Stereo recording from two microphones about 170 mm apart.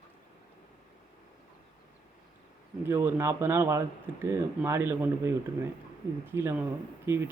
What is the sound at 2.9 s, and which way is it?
Speech, 15° right (ahead or behind).